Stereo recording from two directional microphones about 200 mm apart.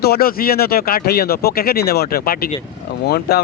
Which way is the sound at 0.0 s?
50° left (ahead or behind).